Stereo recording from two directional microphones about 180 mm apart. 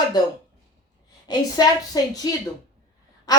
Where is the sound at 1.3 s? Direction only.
20° left (ahead or behind).